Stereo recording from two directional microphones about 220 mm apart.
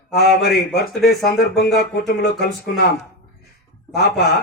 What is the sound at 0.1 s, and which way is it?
A man's voice, 45° left (ahead or behind).